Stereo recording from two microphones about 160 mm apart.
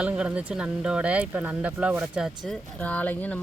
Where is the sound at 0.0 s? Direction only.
5° right (ahead or behind).